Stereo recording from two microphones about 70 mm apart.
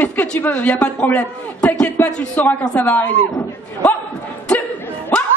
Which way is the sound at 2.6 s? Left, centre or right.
Centre.